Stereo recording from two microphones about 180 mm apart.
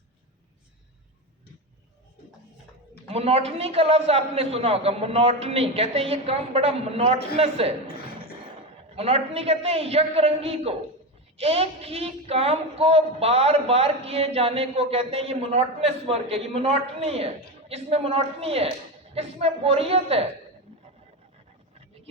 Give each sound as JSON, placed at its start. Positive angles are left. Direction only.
{"t": 3.1, "sound": "a woman's voice", "side_deg": -35}
{"t": 9.0, "sound": "a woman's voice", "side_deg": -35}